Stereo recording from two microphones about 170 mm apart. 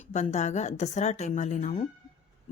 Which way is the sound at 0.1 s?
45° left (ahead or behind).